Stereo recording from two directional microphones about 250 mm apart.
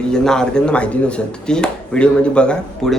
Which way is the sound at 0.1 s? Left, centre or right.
Centre.